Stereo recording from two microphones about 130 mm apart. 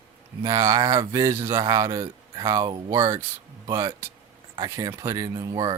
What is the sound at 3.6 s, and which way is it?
Speech, 35° right (ahead or behind).